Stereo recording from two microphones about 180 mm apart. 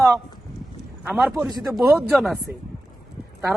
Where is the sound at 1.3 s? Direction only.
20° right (ahead or behind).